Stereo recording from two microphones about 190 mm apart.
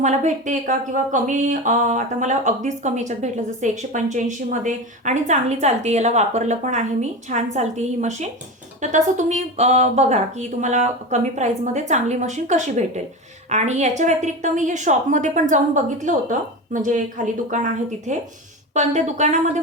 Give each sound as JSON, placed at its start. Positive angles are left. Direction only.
{"t": 0.0, "sound": "speech", "side_deg": -40}